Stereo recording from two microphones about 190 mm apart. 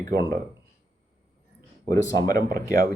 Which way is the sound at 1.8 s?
20° left (ahead or behind).